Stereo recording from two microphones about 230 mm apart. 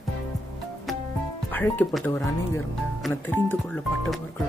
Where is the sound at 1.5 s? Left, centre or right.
Centre.